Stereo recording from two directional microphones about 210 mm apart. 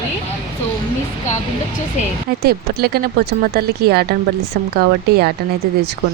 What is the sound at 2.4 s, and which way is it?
Speech, 45° right (ahead or behind).